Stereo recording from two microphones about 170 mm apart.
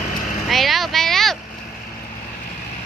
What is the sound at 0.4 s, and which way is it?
Vehicle, centre (ahead or behind).